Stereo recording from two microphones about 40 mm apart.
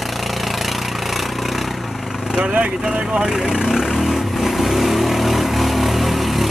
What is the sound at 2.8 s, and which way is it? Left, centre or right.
Speech, centre.